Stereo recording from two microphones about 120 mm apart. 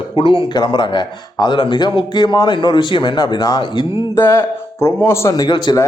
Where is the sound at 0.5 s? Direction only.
40° left (ahead or behind).